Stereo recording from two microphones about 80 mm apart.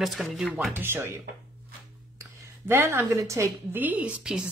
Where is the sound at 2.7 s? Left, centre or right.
Right.